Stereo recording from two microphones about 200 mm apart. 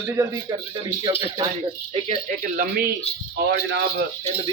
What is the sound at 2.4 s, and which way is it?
Speech, 40° right (ahead or behind).